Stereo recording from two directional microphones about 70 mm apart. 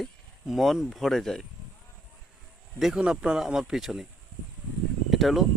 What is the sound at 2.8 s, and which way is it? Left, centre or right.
Speech, centre.